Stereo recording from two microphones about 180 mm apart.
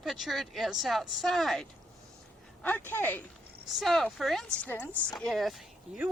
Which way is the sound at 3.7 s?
Centre (ahead or behind).